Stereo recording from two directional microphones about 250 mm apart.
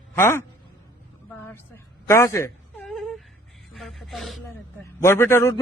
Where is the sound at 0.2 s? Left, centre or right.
Centre.